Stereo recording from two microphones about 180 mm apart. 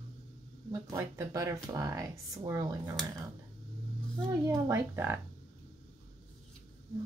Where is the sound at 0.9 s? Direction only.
15° right (ahead or behind).